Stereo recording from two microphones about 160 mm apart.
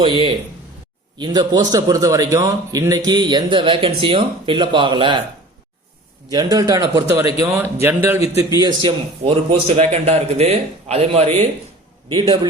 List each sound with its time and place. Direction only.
0.0 s a man's voice: 30° right (ahead or behind)
6.3 s a man's voice: 25° right (ahead or behind)
8.5 s a man's voice: 25° right (ahead or behind)
12.0 s a man's voice: 30° right (ahead or behind)